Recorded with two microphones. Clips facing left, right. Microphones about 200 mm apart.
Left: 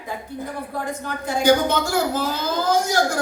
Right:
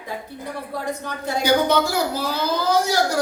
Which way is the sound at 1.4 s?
50° left (ahead or behind).